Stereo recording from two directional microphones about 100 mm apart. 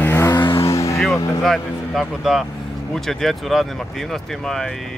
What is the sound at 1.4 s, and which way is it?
Speech, centre (ahead or behind).